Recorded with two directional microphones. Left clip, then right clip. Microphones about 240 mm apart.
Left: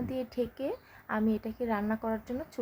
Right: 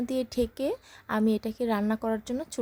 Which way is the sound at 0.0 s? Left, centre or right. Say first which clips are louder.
Right 5 dB; right.